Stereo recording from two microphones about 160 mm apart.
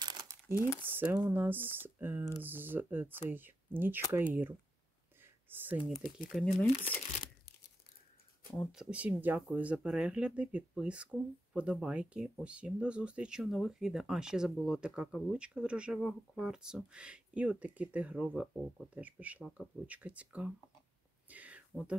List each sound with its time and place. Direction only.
0.0 s crumpling: 25° right (ahead or behind)
0.8 s speech: 10° right (ahead or behind)
6.2 s speech: centre (ahead or behind)
8.7 s speech: 10° right (ahead or behind)
21.3 s a sound: 10° right (ahead or behind)